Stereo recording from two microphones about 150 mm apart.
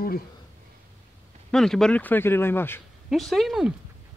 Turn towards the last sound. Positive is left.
turn(degrees=0)  # may be behind; listen again after turning